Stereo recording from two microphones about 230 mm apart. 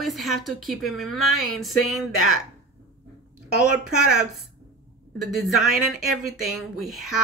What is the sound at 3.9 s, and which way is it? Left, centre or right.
Speech, centre.